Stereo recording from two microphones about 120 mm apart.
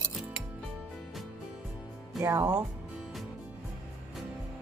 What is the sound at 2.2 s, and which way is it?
Speech, 20° right (ahead or behind).